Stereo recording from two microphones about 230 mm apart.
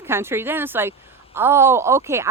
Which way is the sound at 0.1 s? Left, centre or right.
Centre.